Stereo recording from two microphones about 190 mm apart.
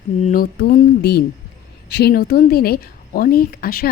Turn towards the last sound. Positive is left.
turn(degrees=50)  # may be behind; listen again after turning